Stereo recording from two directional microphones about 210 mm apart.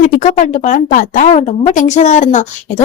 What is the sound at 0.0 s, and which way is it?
A woman's voice, 35° left (ahead or behind).